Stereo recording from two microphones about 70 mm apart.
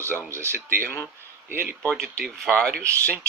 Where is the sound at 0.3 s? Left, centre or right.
Right.